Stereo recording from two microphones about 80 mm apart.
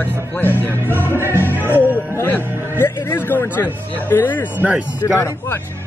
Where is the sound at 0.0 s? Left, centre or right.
Left.